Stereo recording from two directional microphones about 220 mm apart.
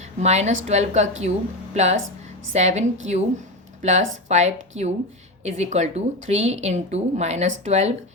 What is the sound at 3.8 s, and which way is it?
Speech, 30° right (ahead or behind).